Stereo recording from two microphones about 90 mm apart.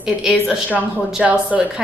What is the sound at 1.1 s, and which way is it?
Speech, 15° right (ahead or behind).